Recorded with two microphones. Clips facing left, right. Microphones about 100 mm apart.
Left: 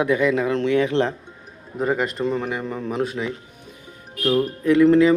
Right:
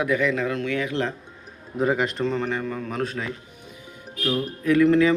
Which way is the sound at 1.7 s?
Centre (ahead or behind).